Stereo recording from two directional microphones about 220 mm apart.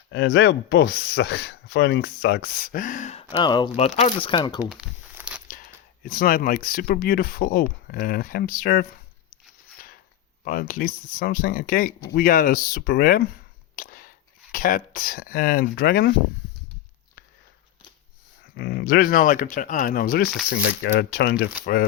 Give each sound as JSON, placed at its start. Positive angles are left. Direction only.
{"t": 0.1, "sound": "speech", "side_deg": 55}
{"t": 3.4, "sound": "speech", "side_deg": 20}
{"t": 4.6, "sound": "crumpling", "side_deg": -5}
{"t": 5.5, "sound": "speech", "side_deg": 40}
{"t": 10.4, "sound": "speech", "side_deg": 40}
{"t": 13.7, "sound": "a sound", "side_deg": 40}
{"t": 14.5, "sound": "speech", "side_deg": 40}
{"t": 18.5, "sound": "speech", "side_deg": 45}